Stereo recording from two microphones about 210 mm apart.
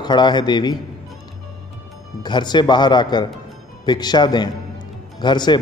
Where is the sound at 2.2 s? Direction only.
20° left (ahead or behind).